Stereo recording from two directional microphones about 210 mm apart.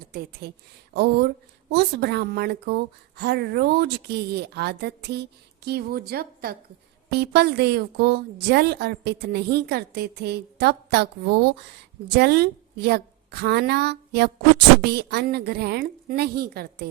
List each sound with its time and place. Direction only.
0.1 s a woman's voice: 45° right (ahead or behind)